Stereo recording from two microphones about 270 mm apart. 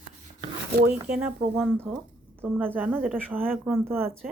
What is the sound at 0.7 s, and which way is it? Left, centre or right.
Speech, right.